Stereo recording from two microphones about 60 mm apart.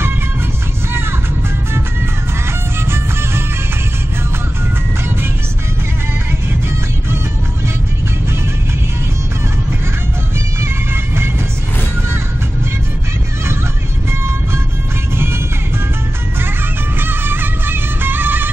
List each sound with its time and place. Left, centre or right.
2.9 s music: right
17.0 s music: right